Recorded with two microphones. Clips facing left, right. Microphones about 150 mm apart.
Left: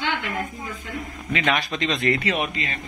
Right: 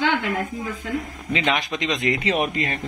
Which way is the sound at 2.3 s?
45° right (ahead or behind).